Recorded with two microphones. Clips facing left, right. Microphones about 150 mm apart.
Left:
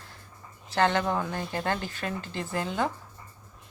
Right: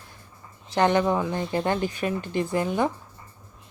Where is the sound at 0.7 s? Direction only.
15° right (ahead or behind).